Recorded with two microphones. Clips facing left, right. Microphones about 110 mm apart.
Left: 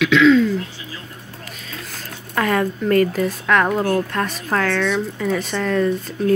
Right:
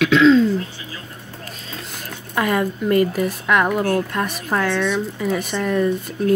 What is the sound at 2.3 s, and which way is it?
Speech, 10° right (ahead or behind).